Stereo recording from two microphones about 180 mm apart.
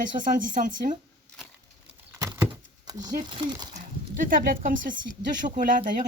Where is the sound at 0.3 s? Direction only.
45° right (ahead or behind).